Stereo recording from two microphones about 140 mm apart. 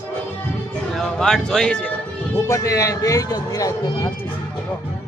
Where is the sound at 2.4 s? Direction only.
25° left (ahead or behind).